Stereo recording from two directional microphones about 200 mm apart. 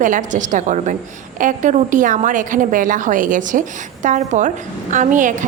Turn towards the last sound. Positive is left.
turn(degrees=-40)  # may be behind; listen again after turning